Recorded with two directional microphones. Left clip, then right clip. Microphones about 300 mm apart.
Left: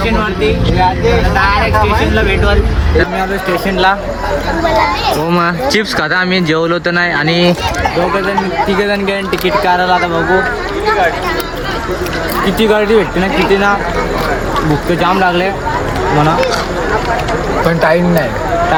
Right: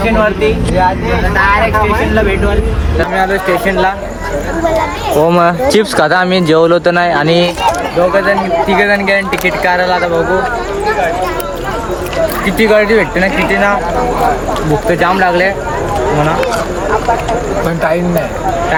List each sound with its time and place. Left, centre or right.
5.2 s speech: centre
8.8 s speech: centre
12.5 s speech: centre
15.0 s speech: centre
17.7 s speech: left